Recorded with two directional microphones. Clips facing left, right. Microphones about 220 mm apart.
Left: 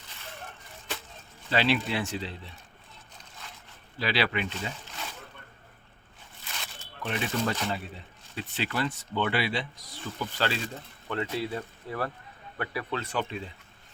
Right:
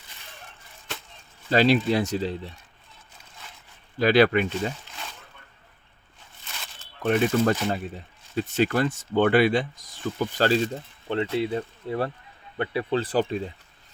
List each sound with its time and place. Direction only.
1.5 s speech: 40° right (ahead or behind)
3.9 s speech: 45° right (ahead or behind)
7.0 s speech: 50° right (ahead or behind)
11.1 s speech: 25° right (ahead or behind)